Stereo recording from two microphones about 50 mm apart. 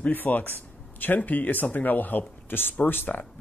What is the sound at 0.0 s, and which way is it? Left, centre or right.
Speech, left.